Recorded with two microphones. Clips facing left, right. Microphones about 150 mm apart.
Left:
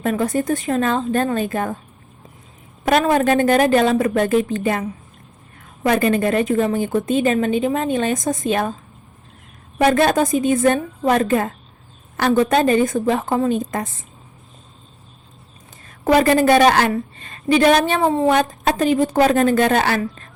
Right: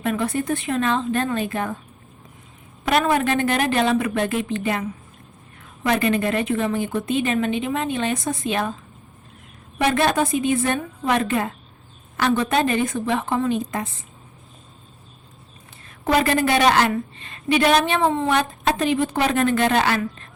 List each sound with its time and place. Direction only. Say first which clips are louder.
0.0 s a woman's voice: left 4 dB; 40° left (ahead or behind)
2.8 s a woman's voice: left 4 dB; 40° left (ahead or behind)
9.7 s a woman's voice: left 4 dB; 45° left (ahead or behind)
16.1 s a woman's voice: left 6 dB; 40° left (ahead or behind)